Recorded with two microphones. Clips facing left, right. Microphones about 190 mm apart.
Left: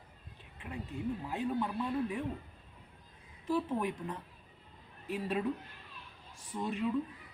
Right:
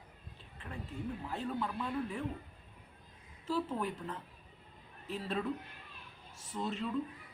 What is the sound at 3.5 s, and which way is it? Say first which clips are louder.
A man's voice: left 3 dB; 15° left (ahead or behind).